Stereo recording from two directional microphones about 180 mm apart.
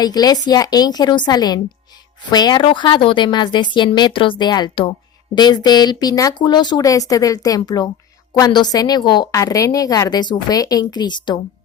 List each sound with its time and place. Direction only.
0.0 s a woman's voice: 20° left (ahead or behind)